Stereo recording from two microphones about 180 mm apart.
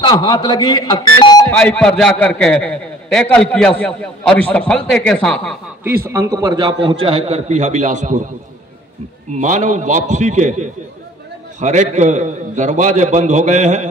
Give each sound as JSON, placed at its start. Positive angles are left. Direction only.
{"t": 0.0, "sound": "speech", "side_deg": 25}
{"t": 1.6, "sound": "a man's voice", "side_deg": 5}
{"t": 6.0, "sound": "a man's voice", "side_deg": -15}
{"t": 9.3, "sound": "a man's voice", "side_deg": -40}